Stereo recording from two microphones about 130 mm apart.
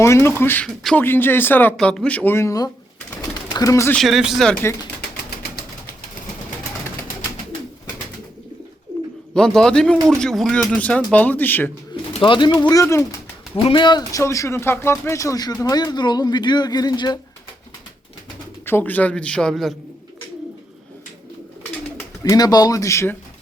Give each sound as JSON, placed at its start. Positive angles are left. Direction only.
{"t": 0.0, "sound": "speech", "side_deg": 20}
{"t": 1.7, "sound": "speech", "side_deg": 5}
{"t": 3.2, "sound": "pigeon", "side_deg": 25}
{"t": 3.9, "sound": "a man's voice", "side_deg": 0}
{"t": 9.3, "sound": "a man's voice", "side_deg": 5}
{"t": 12.2, "sound": "speech", "side_deg": 40}
{"t": 13.6, "sound": "speech", "side_deg": 40}
{"t": 14.2, "sound": "speech", "side_deg": 20}
{"t": 18.6, "sound": "speech", "side_deg": 15}
{"t": 22.2, "sound": "speech", "side_deg": 30}